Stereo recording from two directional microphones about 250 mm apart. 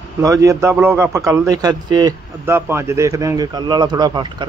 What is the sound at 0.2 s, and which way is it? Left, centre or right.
Speech, centre.